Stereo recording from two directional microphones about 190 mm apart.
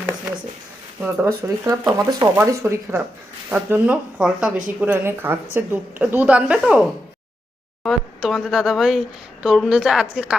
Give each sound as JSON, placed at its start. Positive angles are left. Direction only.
{"t": 1.4, "sound": "speech", "side_deg": -15}
{"t": 7.9, "sound": "speech", "side_deg": 0}